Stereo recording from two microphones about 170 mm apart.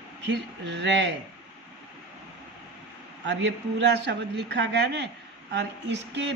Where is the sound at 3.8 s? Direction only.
90° right.